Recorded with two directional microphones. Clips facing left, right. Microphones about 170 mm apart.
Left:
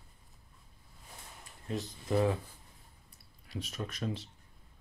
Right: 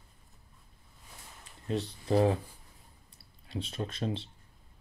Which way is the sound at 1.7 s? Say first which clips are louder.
Right 4 dB; 30° right (ahead or behind).